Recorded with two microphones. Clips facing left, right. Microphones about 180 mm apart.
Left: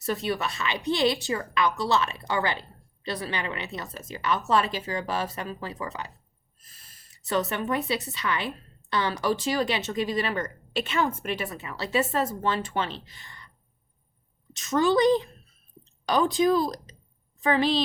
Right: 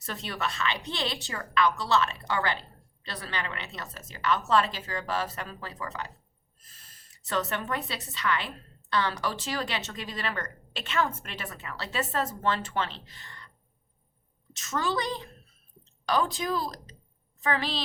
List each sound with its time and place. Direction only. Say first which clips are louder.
0.0 s a woman's voice: left 6 dB; 10° left (ahead or behind)
7.3 s a woman's voice: left 4 dB; 10° left (ahead or behind)
14.5 s a woman's voice: left 8 dB; 15° left (ahead or behind)